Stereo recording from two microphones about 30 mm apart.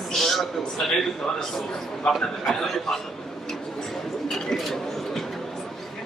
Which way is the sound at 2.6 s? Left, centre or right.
Centre.